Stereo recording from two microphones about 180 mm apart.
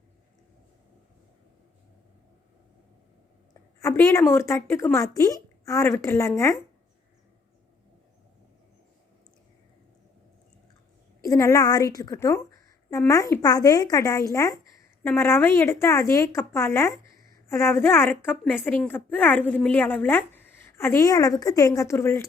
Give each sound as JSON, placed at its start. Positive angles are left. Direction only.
{"t": 3.5, "sound": "a woman's voice", "side_deg": 15}
{"t": 11.3, "sound": "a woman's voice", "side_deg": 15}